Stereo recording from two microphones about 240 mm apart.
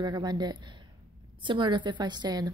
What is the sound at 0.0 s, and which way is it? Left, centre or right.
A woman's voice, centre.